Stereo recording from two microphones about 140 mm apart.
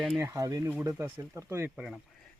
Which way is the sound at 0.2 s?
20° right (ahead or behind).